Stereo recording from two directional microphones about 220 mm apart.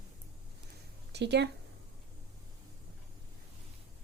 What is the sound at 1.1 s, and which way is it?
Speech, 50° right (ahead or behind).